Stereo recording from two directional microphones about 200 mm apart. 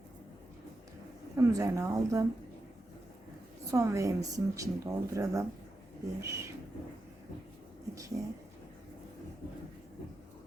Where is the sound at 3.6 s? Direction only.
15° right (ahead or behind).